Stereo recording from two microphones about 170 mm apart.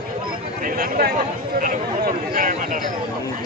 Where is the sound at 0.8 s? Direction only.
60° right (ahead or behind).